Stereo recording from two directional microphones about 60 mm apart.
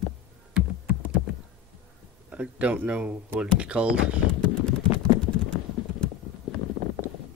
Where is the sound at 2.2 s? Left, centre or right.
Right.